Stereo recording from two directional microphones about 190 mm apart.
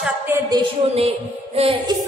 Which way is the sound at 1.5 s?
30° right (ahead or behind).